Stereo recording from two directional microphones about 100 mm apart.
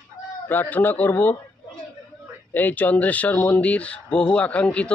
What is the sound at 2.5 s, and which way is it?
Speech, 15° left (ahead or behind).